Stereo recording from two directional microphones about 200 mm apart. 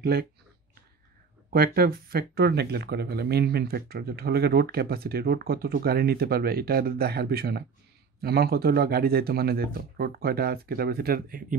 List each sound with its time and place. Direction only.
0.0 s speech: 50° right (ahead or behind)
1.5 s speech: 50° right (ahead or behind)